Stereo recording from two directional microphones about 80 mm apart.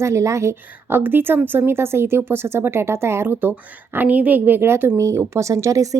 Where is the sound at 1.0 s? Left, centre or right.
Right.